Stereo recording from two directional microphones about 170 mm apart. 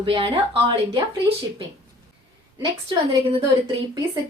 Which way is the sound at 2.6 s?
30° right (ahead or behind).